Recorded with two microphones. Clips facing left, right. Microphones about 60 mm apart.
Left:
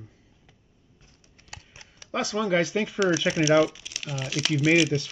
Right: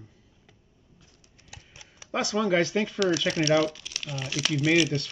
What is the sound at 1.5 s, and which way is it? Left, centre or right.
Clip-clop, left.